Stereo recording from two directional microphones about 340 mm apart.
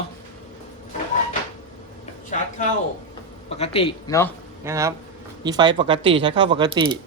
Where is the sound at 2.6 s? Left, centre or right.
Left.